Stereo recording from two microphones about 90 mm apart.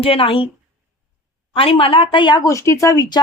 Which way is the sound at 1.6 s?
90° left.